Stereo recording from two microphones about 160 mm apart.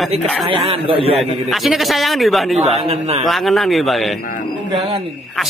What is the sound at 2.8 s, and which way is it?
Speech, 40° right (ahead or behind).